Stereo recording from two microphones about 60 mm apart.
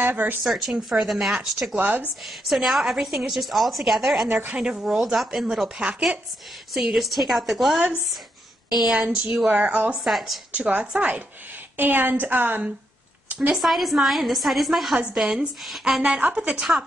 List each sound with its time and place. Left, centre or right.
0.0 s speech: right
0.4 s a woman's voice: centre
1.8 s a woman's voice: right
2.2 s a woman's voice: centre
4.3 s a woman's voice: right
4.6 s a woman's voice: centre
8.8 s speech: centre
9.5 s a woman's voice: right
9.9 s a woman's voice: centre
10.5 s a woman's voice: right
13.5 s a woman's voice: centre
16.0 s a woman's voice: right
16.7 s speech: centre